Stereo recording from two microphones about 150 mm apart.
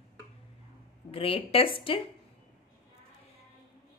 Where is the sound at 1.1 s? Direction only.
40° left (ahead or behind).